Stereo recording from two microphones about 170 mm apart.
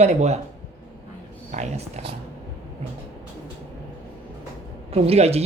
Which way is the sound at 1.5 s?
40° right (ahead or behind).